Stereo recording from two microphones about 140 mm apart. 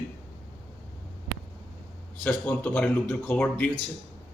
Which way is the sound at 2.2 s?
10° left (ahead or behind).